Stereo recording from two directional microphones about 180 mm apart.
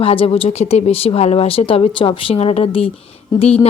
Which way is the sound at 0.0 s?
30° left (ahead or behind).